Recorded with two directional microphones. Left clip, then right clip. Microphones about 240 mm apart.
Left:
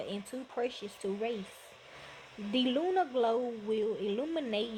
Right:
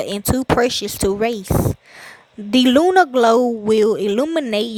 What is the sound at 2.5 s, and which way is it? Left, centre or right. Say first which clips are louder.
Speech: right 17 dB; right.